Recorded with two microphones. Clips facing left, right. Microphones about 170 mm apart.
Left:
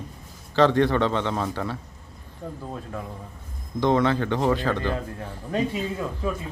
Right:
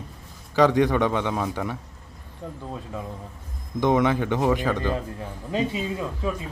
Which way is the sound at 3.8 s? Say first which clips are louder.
Even; 15° right (ahead or behind).